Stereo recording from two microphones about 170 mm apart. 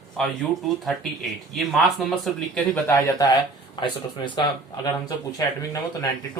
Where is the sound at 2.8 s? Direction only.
20° left (ahead or behind).